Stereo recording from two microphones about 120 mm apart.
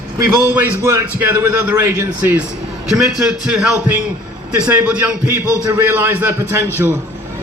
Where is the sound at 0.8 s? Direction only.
20° right (ahead or behind).